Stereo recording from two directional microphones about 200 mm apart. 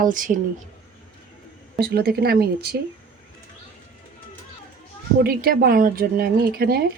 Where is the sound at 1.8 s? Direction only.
50° right (ahead or behind).